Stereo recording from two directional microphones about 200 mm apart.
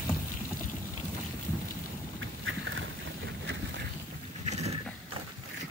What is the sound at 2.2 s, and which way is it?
Vehicle, 75° right (ahead or behind).